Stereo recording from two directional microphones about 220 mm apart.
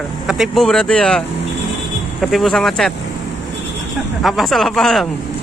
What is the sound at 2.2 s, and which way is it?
Speech, centre (ahead or behind).